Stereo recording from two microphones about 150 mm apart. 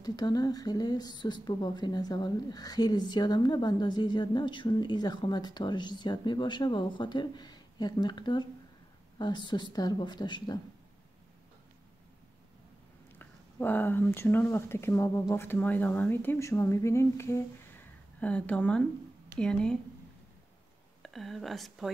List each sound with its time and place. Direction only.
0.0 s speech: 25° left (ahead or behind)
13.2 s speech: 15° left (ahead or behind)
21.0 s speech: centre (ahead or behind)